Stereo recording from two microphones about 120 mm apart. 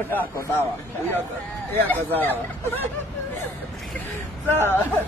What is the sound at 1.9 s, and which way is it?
Speech, 15° left (ahead or behind).